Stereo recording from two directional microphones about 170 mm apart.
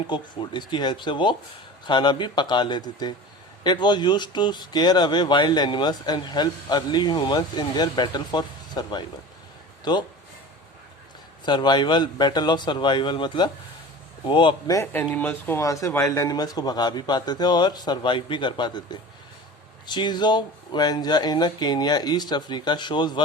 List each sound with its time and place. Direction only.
0.1 s speech: 25° left (ahead or behind)
11.4 s speech: 25° left (ahead or behind)
15.1 s speech: 10° left (ahead or behind); by 23.2 s 25° left (ahead or behind)